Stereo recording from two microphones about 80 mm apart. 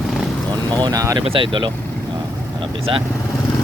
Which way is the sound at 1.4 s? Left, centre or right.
Right.